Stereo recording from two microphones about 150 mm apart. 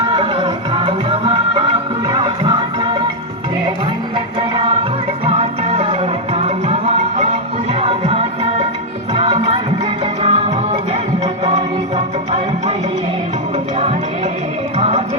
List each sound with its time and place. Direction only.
0.1 s music: 35° right (ahead or behind)
4.4 s music: 35° right (ahead or behind)
14.8 s music: 45° right (ahead or behind)